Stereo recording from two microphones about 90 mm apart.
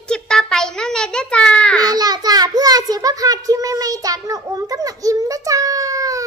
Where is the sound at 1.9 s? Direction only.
45° right (ahead or behind).